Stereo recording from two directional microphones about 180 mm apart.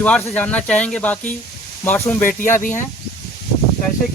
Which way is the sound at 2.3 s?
45° left (ahead or behind).